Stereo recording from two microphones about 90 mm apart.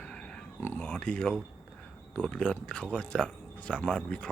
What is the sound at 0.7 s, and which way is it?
A man's voice, 10° left (ahead or behind).